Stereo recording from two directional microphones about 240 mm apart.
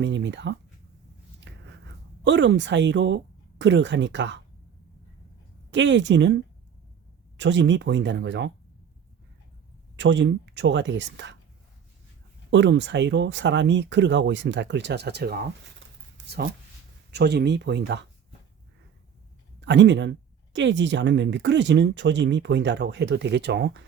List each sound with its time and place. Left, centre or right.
0.0 s speech: right
1.5 s a sound: right
2.2 s speech: right
5.7 s speech: right
9.9 s speech: right
12.5 s speech: right
16.1 s a sound: right
17.1 s speech: right
19.6 s speech: right